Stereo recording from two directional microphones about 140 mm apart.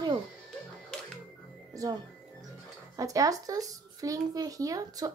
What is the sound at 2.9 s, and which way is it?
A child's voice, 25° right (ahead or behind).